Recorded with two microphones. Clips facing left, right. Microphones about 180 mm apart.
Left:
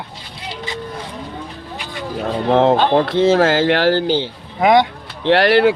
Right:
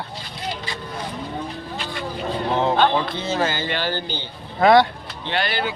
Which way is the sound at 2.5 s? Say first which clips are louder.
Left 6 dB; 80° left.